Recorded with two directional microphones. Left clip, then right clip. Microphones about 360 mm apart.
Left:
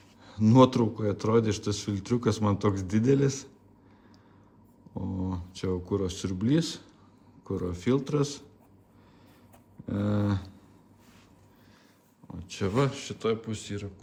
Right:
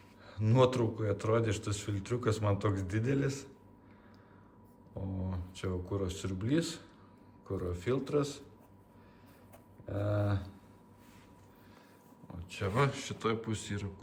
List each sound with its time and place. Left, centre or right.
0.3 s speech: centre
5.2 s a man's voice: centre
9.9 s a man's voice: left
12.5 s a man's voice: centre